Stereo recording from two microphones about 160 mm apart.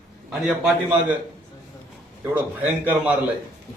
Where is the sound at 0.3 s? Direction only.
5° right (ahead or behind).